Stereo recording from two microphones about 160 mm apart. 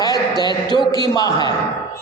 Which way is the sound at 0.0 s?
25° left (ahead or behind).